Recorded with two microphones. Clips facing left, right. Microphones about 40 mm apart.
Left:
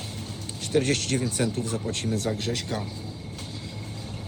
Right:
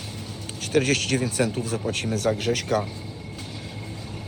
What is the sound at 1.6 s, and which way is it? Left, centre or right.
Speech, right.